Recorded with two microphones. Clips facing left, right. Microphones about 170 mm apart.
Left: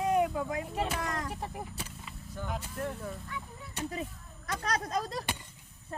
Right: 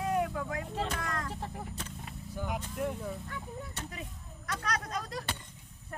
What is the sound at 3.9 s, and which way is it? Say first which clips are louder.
Speech: left 6 dB; 30° left (ahead or behind).